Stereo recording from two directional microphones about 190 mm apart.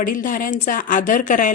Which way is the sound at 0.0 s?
45° left (ahead or behind).